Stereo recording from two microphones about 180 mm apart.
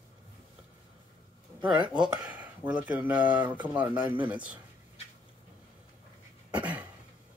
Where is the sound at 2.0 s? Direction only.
5° right (ahead or behind).